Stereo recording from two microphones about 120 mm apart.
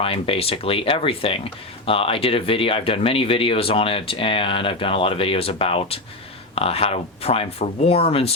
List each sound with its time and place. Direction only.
0.0 s speech: 55° left (ahead or behind)